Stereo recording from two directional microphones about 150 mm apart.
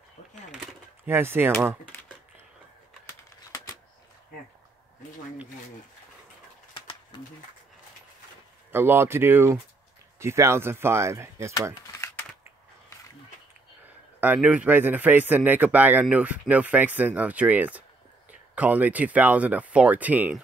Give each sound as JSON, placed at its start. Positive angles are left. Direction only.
{"t": 1.0, "sound": "speech", "side_deg": -15}
{"t": 8.7, "sound": "speech", "side_deg": -15}
{"t": 14.2, "sound": "speech", "side_deg": -10}